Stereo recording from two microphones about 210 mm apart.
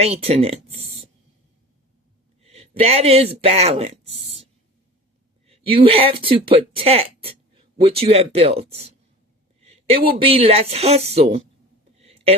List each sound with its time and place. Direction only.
0.0 s speech: 30° right (ahead or behind)
2.4 s speech: 30° right (ahead or behind)
5.5 s speech: 25° right (ahead or behind)
9.6 s a sound: 30° right (ahead or behind)
10.2 s speech: 25° right (ahead or behind)
11.9 s a sound: 30° right (ahead or behind)